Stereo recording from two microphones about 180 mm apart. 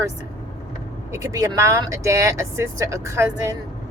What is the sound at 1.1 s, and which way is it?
Speech, 15° right (ahead or behind).